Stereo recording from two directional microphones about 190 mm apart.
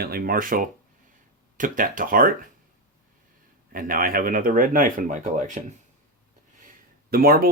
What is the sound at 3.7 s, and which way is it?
Speech, 45° right (ahead or behind).